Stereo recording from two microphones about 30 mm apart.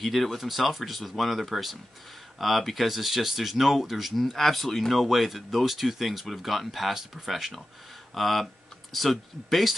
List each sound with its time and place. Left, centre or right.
0.0 s speech: centre
8.1 s speech: centre